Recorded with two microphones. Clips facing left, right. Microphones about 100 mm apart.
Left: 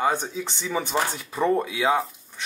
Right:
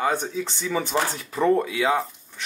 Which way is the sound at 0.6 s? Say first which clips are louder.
Right 1 dB; 10° left (ahead or behind).